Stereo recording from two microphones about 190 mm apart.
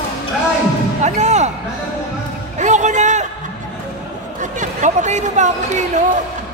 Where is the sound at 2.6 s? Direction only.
40° right (ahead or behind).